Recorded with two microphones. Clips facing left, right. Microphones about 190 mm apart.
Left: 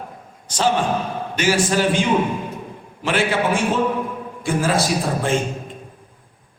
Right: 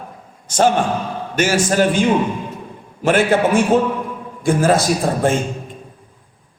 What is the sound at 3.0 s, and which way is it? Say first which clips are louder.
A man's voice: right 5 dB; 45° right (ahead or behind).